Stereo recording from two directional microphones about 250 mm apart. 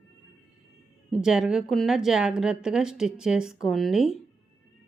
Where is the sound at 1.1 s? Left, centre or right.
Centre.